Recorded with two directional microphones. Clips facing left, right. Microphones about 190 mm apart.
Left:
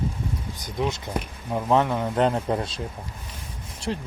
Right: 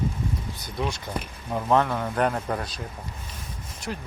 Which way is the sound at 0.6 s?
20° left (ahead or behind).